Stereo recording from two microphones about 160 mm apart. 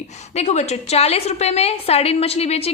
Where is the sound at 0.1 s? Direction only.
45° left (ahead or behind).